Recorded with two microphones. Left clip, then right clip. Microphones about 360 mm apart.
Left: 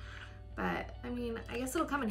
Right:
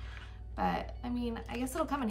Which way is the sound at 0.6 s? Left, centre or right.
Centre.